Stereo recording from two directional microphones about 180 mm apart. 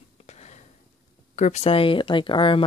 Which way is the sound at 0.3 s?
40° left (ahead or behind).